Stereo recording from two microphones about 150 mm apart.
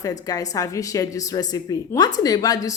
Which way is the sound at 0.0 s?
25° left (ahead or behind).